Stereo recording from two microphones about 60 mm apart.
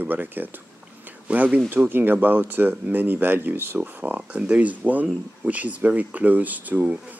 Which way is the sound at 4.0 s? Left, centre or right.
Centre.